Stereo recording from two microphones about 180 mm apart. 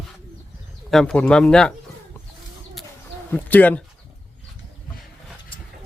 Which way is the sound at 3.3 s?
10° left (ahead or behind).